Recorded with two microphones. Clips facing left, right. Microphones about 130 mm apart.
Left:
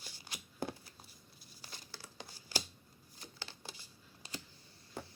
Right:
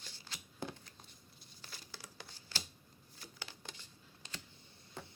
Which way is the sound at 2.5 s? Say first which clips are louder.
Left 6 dB; 10° left (ahead or behind).